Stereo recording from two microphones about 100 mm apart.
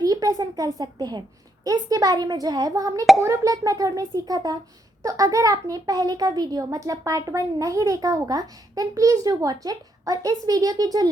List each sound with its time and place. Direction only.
0.0 s a child's voice: 40° right (ahead or behind)